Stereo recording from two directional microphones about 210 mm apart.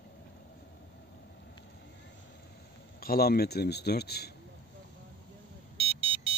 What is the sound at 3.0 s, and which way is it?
Speech, 45° left (ahead or behind).